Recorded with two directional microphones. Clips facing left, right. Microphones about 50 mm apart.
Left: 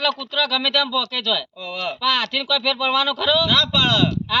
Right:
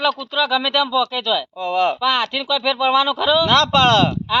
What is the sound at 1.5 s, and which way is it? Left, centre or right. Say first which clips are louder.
Speech: right 9 dB; right.